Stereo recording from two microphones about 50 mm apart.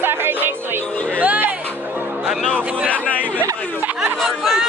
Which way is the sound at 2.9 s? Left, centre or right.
Left.